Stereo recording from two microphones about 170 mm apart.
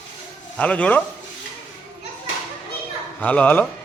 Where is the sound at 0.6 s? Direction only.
10° left (ahead or behind).